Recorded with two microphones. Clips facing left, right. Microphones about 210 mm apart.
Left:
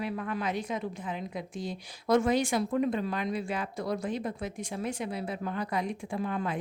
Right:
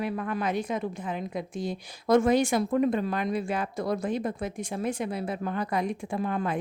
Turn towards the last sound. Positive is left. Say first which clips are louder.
# right 3 dB
turn(degrees=-50)  # may be behind; listen again after turning